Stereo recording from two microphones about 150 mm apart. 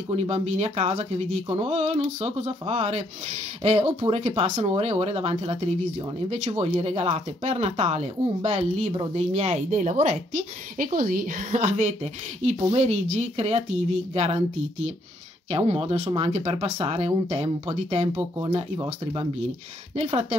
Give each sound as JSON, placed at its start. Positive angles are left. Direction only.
{"t": 0.1, "sound": "speech", "side_deg": -45}
{"t": 9.7, "sound": "a woman's voice", "side_deg": -55}
{"t": 20.0, "sound": "speech", "side_deg": -45}